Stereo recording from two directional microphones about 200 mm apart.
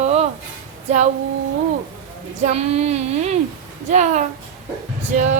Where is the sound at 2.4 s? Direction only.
30° right (ahead or behind).